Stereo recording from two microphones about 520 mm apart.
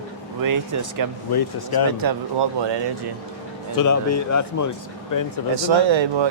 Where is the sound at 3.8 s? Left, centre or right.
Left.